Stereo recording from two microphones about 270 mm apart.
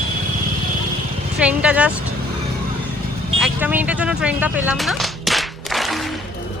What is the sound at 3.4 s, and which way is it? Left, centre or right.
Whip, centre.